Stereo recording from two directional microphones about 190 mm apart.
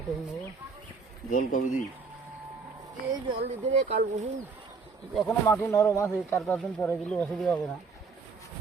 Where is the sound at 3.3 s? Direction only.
35° right (ahead or behind).